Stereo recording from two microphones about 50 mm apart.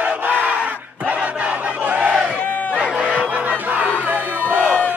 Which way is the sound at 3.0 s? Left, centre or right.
Left.